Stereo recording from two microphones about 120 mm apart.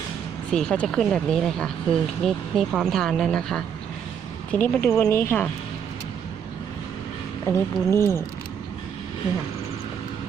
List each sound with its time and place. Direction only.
0.5 s speech: 5° left (ahead or behind)
7.4 s speech: 20° left (ahead or behind)